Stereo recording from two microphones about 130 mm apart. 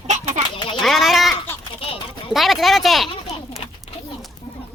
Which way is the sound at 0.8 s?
Centre (ahead or behind).